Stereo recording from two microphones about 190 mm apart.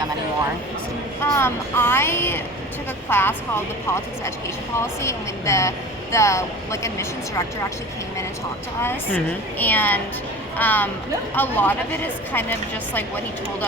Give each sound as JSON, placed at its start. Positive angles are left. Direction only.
{"t": 1.2, "sound": "speech", "side_deg": 10}
{"t": 8.8, "sound": "speech", "side_deg": 10}